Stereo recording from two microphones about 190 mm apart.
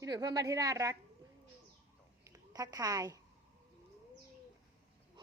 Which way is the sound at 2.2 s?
20° right (ahead or behind).